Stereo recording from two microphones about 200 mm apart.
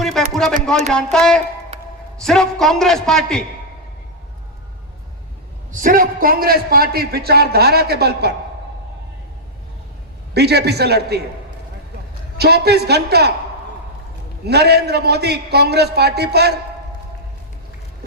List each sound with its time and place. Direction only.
0.0 s a sound: centre (ahead or behind)
0.9 s a man's voice: 5° left (ahead or behind)
5.7 s a man's voice: 40° right (ahead or behind)
10.3 s a man's voice: 55° right (ahead or behind)
12.4 s a man's voice: 55° right (ahead or behind)
14.4 s a man's voice: 55° right (ahead or behind)